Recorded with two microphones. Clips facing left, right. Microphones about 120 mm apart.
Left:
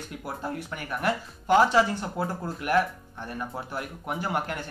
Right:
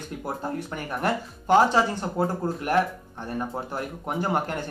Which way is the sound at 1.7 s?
40° right (ahead or behind).